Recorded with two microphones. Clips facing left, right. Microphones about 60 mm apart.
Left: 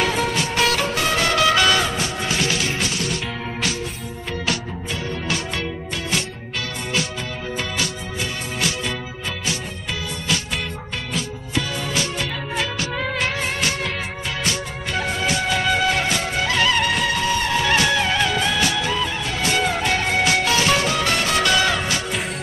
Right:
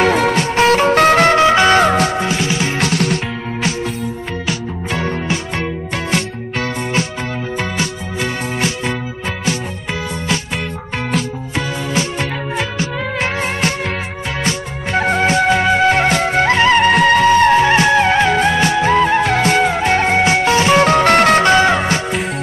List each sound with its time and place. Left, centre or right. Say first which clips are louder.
0.1 s music: right 7 dB; right
0.6 s music: right 9 dB; right
0.9 s music: right 11 dB; right
1.3 s music: right 6 dB; right
1.8 s music: right 10 dB; right
2.4 s music: right 4 dB; right
2.8 s music: right 8 dB; right
8.5 s music: right 3 dB; right
11.9 s music: right 6 dB; right
17.6 s music: right 7 dB; right
19.7 s music: right 7 dB; right
20.8 s music: right 11 dB; right
21.4 s music: right 7 dB; right